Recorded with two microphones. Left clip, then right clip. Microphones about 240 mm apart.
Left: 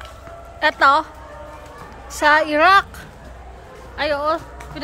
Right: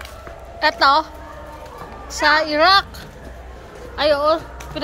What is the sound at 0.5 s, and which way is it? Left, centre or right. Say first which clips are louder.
Speech: even; centre.